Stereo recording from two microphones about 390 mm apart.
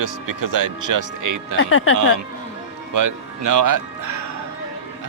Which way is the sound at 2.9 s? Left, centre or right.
Right.